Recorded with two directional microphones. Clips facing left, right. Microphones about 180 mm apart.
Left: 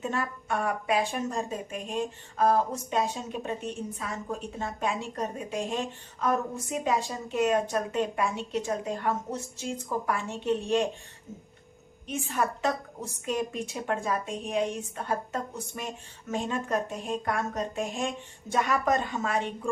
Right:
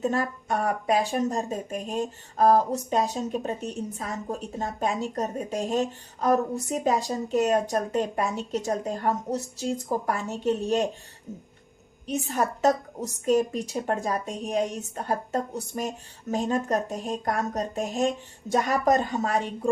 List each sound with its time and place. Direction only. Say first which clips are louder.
0.0 s a woman's voice: right 5 dB; 40° right (ahead or behind)
12.0 s a woman's voice: right 3 dB; 40° right (ahead or behind)